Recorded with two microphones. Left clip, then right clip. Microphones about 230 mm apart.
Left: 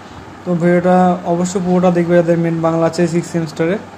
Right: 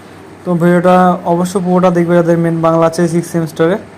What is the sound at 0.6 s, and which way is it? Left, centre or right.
Speech, centre.